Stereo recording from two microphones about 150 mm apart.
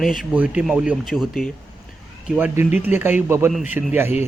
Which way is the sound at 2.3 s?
10° right (ahead or behind).